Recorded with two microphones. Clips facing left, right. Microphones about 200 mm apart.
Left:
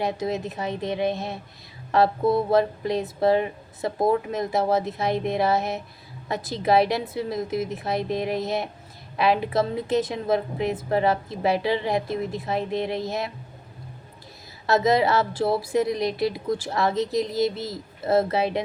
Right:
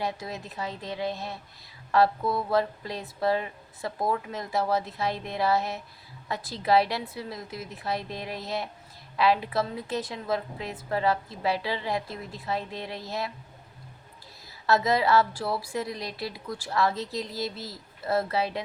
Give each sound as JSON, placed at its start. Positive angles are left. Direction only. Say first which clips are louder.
{"t": 0.0, "sound": "a woman's voice", "louder": "left 7 dB", "side_deg": 20}
{"t": 14.7, "sound": "a woman's voice", "louder": "left 3 dB", "side_deg": 20}